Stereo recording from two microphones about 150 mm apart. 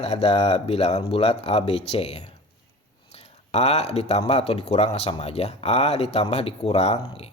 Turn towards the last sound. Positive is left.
turn(degrees=40)  # may be behind; listen again after turning